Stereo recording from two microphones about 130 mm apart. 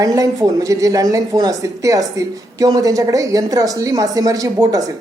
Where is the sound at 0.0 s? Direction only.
25° right (ahead or behind).